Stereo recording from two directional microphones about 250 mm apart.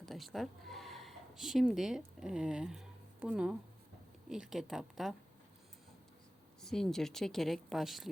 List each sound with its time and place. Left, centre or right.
0.0 s a woman's voice: centre
6.6 s a woman's voice: centre